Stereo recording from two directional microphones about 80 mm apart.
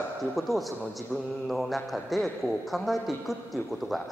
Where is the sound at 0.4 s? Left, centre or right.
Centre.